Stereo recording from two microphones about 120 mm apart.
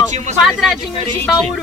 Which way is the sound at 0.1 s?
80° right.